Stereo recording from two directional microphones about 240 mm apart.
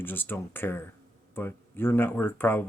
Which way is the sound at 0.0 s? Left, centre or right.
Centre.